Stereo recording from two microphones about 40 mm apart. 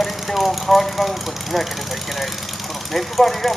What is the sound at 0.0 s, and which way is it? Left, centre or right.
Speech, centre.